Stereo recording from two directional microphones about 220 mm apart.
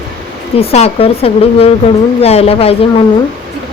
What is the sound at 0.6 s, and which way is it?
Speech, 30° left (ahead or behind).